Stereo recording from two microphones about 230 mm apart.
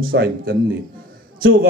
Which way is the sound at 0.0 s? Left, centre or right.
Right.